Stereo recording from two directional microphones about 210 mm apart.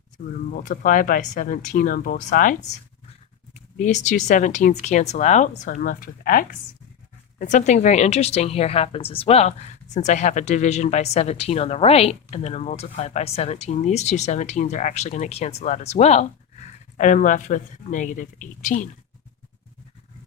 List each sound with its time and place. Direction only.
0.2 s a woman's voice: 45° left (ahead or behind)